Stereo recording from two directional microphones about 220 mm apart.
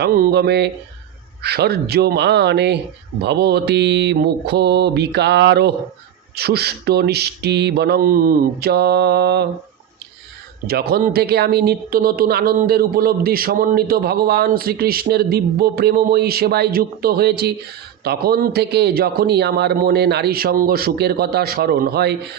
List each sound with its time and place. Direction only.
0.0 s speech: 45° right (ahead or behind)
10.7 s speech: 45° right (ahead or behind)